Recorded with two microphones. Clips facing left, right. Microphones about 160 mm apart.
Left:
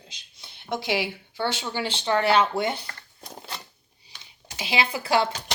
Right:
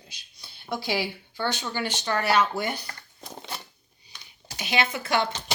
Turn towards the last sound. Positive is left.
turn(degrees=30)  # may be behind; listen again after turning